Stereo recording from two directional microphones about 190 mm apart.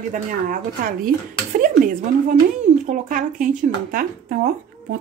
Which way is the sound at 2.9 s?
45° right (ahead or behind).